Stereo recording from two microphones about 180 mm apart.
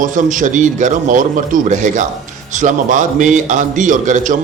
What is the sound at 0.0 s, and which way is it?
A man's voice, 45° right (ahead or behind).